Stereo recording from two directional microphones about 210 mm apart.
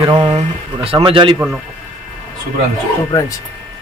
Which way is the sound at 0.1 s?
30° right (ahead or behind).